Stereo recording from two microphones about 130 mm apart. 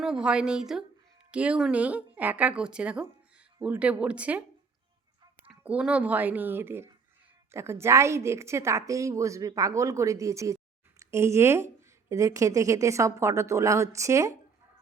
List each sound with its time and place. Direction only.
0.0 s speech: 5° right (ahead or behind)
5.5 s speech: 5° right (ahead or behind); by 14.3 s 25° right (ahead or behind)